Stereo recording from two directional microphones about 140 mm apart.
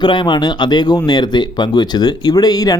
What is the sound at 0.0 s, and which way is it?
Speech, 35° left (ahead or behind).